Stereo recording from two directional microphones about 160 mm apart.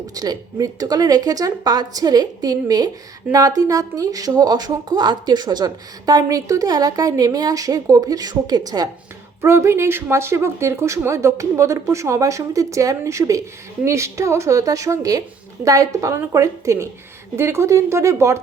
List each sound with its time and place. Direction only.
0.1 s speech: 25° right (ahead or behind)